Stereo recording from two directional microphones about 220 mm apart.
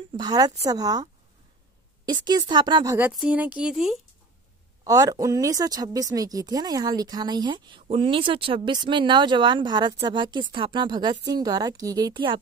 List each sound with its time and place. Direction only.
0.1 s speech: 15° right (ahead or behind)
3.1 s speech: 5° right (ahead or behind)
4.8 s speech: 15° right (ahead or behind)